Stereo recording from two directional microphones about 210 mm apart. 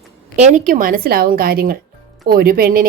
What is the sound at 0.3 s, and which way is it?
Speech, 35° right (ahead or behind).